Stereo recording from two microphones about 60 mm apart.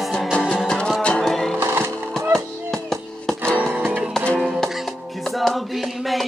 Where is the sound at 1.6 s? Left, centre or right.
Right.